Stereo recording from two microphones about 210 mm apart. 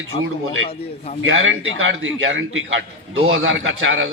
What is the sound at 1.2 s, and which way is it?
A man's voice, 70° right (ahead or behind).